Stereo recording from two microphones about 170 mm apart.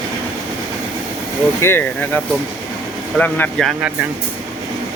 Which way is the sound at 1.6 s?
15° left (ahead or behind).